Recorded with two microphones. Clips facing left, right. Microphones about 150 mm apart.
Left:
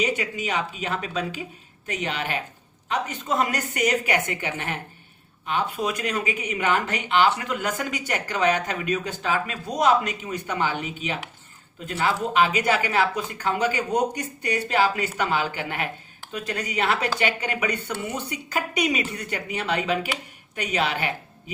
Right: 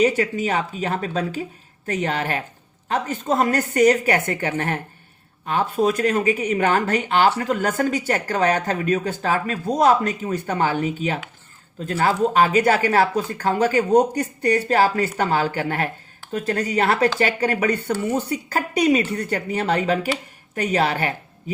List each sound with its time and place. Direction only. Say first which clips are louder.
0.0 s speech: right 7 dB; 50° right (ahead or behind)